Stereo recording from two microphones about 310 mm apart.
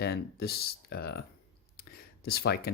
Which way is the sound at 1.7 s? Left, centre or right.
Left.